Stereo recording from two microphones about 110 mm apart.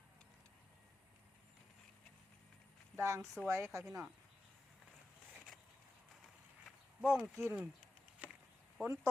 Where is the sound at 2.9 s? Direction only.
25° right (ahead or behind).